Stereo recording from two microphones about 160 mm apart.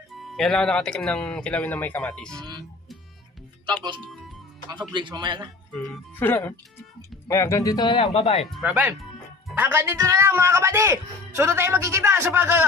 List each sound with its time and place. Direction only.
0.2 s speech: 5° left (ahead or behind)
4.6 s speech: 30° right (ahead or behind)
5.8 s speech: 15° left (ahead or behind)
8.0 s speech: 45° left (ahead or behind)
8.4 s speech: centre (ahead or behind)